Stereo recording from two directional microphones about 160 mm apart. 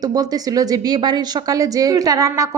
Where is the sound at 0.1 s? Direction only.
25° right (ahead or behind).